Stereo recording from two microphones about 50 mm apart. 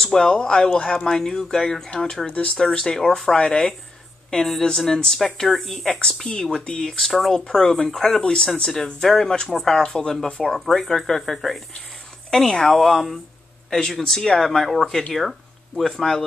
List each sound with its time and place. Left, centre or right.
0.0 s speech: centre
3.3 s speech: centre
4.3 s speech: centre
6.3 s speech: left; by 7.3 s centre
7.3 s speech: centre